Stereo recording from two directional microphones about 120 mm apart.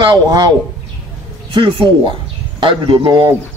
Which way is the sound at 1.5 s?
45° right (ahead or behind).